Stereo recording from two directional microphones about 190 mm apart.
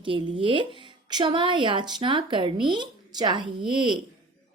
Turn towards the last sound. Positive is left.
turn(degrees=-25)  # may be behind; listen again after turning